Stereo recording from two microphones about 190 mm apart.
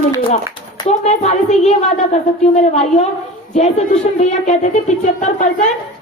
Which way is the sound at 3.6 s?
35° left (ahead or behind).